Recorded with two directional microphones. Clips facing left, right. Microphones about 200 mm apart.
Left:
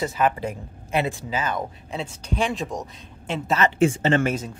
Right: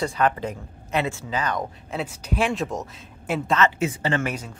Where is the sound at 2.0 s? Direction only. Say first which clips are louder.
Right 1 dB; 5° right (ahead or behind).